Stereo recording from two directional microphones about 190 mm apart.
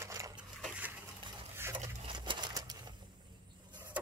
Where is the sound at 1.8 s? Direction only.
25° right (ahead or behind).